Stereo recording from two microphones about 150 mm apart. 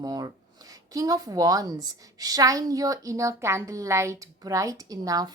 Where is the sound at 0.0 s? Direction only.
25° right (ahead or behind).